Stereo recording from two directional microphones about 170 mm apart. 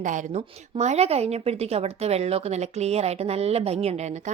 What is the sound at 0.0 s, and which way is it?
Speech, 45° right (ahead or behind).